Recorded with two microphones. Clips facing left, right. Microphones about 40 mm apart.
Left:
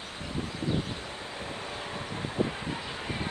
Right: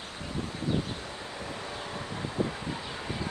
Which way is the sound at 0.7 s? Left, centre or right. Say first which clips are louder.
Right 1 dB; left.